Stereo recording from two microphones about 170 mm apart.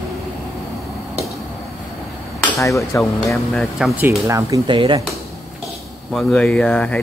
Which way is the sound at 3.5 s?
5° right (ahead or behind).